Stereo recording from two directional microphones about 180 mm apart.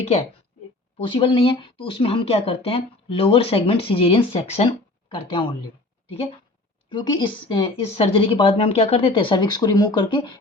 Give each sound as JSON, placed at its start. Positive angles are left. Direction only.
{"t": 0.9, "sound": "speech", "side_deg": 30}
{"t": 6.9, "sound": "speech", "side_deg": 25}